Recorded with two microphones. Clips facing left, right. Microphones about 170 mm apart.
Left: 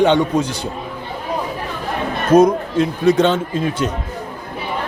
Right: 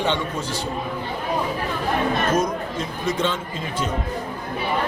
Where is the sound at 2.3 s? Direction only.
65° left (ahead or behind).